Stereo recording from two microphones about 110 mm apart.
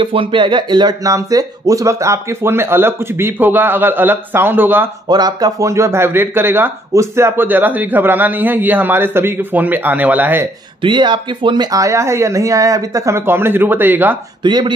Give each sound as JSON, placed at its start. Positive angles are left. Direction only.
{"t": 0.0, "sound": "speech", "side_deg": -55}
{"t": 5.0, "sound": "speech", "side_deg": -40}
{"t": 10.8, "sound": "speech", "side_deg": -45}
{"t": 14.4, "sound": "speech", "side_deg": -40}